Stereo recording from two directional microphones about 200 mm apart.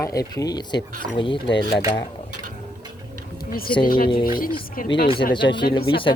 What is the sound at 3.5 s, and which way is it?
Speech, 45° left (ahead or behind).